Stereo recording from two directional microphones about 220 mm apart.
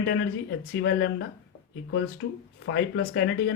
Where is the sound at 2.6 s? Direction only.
55° left (ahead or behind).